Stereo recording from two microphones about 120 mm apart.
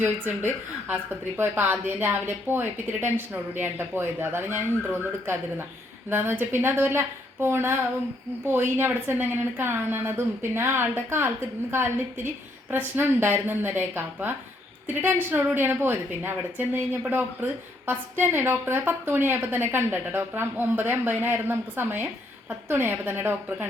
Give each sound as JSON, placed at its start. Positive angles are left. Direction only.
{"t": 0.0, "sound": "a woman's voice", "side_deg": -15}